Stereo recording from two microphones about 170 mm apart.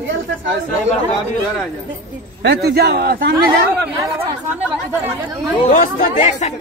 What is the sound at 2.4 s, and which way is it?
Speech, 80° right.